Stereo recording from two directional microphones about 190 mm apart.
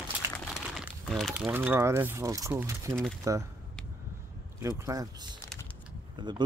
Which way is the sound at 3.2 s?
15° right (ahead or behind).